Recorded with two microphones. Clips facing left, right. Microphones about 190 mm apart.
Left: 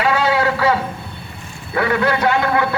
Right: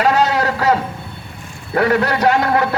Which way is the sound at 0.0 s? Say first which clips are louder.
Right 1 dB; 40° right (ahead or behind).